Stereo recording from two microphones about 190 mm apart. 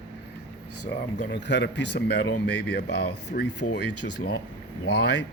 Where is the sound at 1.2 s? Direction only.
65° left (ahead or behind).